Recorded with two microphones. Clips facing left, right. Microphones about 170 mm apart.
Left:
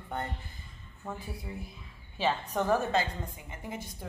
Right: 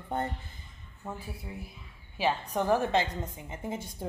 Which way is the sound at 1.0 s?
10° right (ahead or behind).